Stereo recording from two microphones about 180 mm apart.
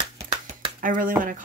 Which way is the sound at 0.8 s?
45° right (ahead or behind).